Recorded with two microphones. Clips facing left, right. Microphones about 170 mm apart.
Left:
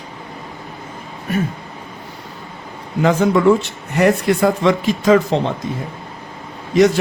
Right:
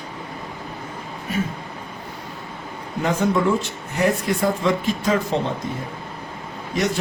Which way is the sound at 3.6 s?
70° left (ahead or behind).